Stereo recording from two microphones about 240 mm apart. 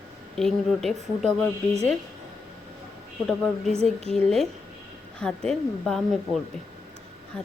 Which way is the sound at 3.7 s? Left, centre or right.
Right.